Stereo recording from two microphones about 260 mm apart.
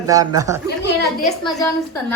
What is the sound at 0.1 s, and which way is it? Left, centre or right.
Speech, centre.